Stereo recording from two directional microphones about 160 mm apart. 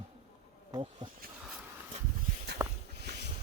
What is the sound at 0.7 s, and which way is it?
Bee, 30° right (ahead or behind).